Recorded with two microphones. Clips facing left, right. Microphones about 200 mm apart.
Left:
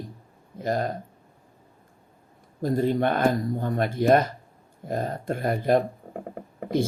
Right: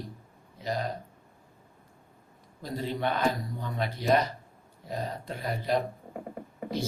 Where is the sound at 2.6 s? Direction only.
50° left (ahead or behind).